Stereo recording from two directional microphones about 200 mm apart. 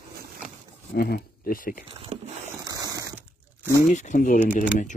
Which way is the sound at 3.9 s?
40° left (ahead or behind).